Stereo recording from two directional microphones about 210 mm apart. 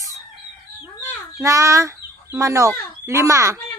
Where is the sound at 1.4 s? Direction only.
15° right (ahead or behind).